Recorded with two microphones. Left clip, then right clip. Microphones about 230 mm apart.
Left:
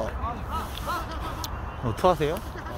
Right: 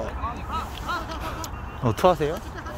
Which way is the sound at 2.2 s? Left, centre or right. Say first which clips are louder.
Right 1 dB; centre.